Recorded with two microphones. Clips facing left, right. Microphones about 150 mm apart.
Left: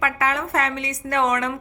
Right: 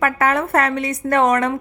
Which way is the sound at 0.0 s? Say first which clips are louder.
Right 5 dB; 50° right (ahead or behind).